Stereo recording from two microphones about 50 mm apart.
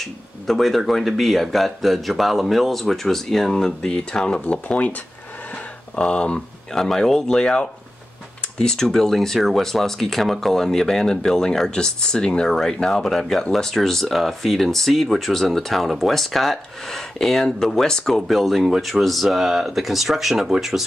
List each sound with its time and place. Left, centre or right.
0.0 s speech: centre; by 4.9 s left
5.9 s speech: centre